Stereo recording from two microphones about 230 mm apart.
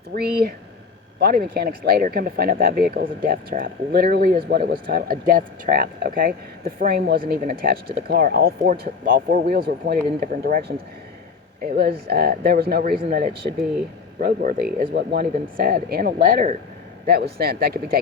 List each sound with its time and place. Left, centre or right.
0.1 s speech: right
14.2 s speech: right